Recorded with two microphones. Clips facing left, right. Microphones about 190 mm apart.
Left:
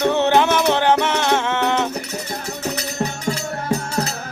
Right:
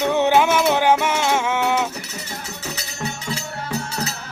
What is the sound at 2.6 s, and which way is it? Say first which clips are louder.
Music: left 7 dB; 55° left (ahead or behind).